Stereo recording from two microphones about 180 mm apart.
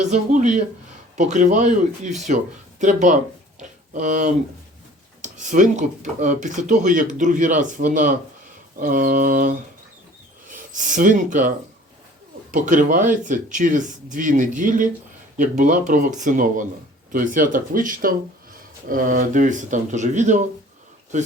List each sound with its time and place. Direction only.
0.0 s speech: 40° right (ahead or behind)
10.5 s speech: 45° right (ahead or behind)